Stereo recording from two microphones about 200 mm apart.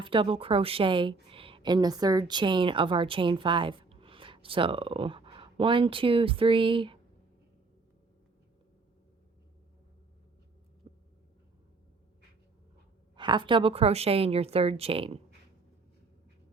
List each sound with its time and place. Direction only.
0.0 s a woman's voice: 25° right (ahead or behind)
13.1 s a woman's voice: 25° right (ahead or behind)